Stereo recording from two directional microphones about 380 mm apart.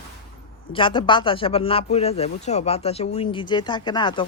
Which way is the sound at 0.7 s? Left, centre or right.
Centre.